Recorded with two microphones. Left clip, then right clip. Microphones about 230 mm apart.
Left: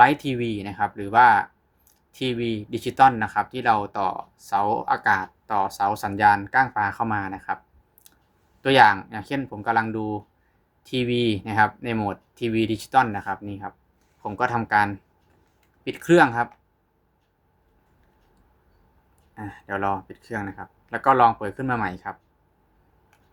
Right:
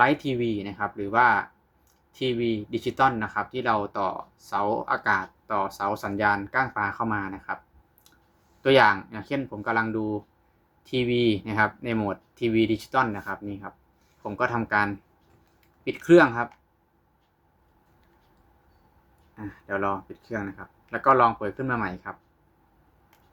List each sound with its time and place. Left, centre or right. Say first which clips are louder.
0.0 s speech: left 4 dB; centre
8.6 s speech: left 3 dB; centre
19.4 s speech: left 1 dB; centre